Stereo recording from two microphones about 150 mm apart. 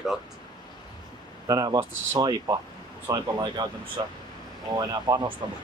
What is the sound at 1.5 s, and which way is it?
Speech, 25° right (ahead or behind).